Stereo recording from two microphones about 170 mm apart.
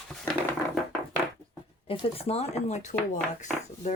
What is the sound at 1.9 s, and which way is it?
Speech, 35° left (ahead or behind).